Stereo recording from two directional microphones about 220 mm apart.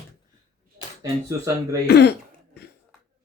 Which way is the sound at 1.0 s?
15° right (ahead or behind).